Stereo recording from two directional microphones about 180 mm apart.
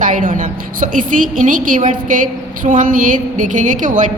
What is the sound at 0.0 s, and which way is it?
A woman's voice, 50° right (ahead or behind).